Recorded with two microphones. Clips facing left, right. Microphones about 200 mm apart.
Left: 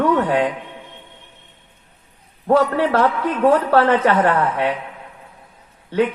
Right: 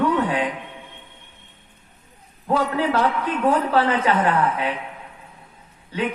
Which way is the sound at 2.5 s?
60° left (ahead or behind).